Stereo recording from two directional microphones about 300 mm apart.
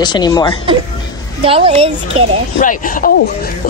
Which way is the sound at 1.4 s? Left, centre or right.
Centre.